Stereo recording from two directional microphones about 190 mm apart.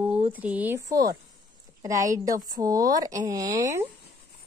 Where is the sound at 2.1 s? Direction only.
20° right (ahead or behind).